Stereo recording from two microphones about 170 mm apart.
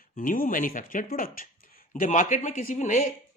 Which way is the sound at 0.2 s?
55° left (ahead or behind).